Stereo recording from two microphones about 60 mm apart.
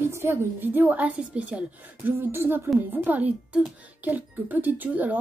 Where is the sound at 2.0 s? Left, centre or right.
Right.